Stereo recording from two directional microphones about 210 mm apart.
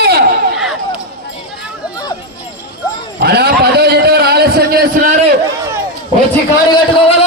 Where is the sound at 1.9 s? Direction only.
20° left (ahead or behind).